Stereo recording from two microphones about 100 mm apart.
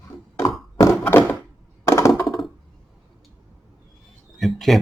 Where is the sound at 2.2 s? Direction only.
Centre (ahead or behind).